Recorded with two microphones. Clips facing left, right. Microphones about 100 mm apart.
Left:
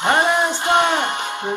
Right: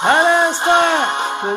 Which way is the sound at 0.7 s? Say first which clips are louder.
Right 2 dB; 25° right (ahead or behind).